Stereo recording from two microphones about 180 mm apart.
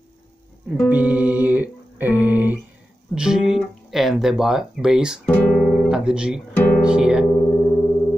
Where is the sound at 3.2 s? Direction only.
5° right (ahead or behind).